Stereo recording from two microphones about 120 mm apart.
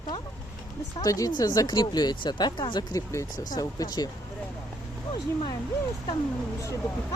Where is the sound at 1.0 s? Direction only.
30° left (ahead or behind).